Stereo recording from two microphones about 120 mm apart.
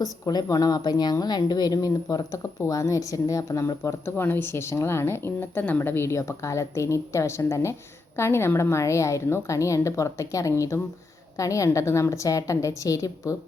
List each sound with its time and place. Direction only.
0.0 s speech: 30° left (ahead or behind)